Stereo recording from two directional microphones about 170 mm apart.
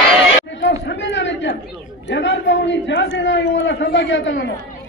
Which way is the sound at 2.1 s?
90° left.